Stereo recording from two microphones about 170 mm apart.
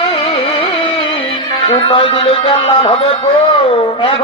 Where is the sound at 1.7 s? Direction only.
30° left (ahead or behind).